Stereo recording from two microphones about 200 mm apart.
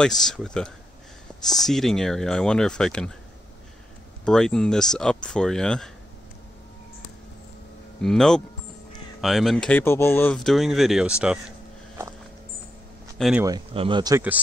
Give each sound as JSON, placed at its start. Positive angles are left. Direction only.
{"t": 0.0, "sound": "speech", "side_deg": 0}
{"t": 4.2, "sound": "speech", "side_deg": 5}
{"t": 8.0, "sound": "speech", "side_deg": 0}
{"t": 13.2, "sound": "speech", "side_deg": -5}
{"t": 13.5, "sound": "speech", "side_deg": -25}